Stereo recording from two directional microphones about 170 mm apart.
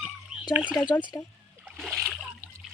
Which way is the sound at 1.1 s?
15° left (ahead or behind).